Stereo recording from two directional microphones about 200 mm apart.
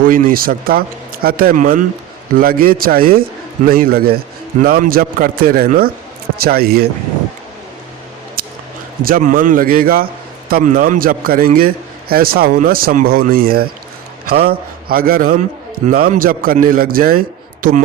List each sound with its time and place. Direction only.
0.0 s a man's voice: 45° right (ahead or behind)
8.4 s a sound: 45° right (ahead or behind)
9.0 s a man's voice: 45° right (ahead or behind)